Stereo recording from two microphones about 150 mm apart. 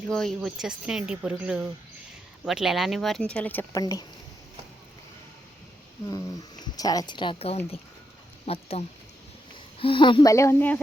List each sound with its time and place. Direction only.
0.1 s speech: centre (ahead or behind); by 4.0 s 20° left (ahead or behind)
6.1 s speech: 25° left (ahead or behind); by 8.6 s 45° left (ahead or behind)
9.7 s speech: 35° left (ahead or behind)
10.3 s speech: 15° left (ahead or behind)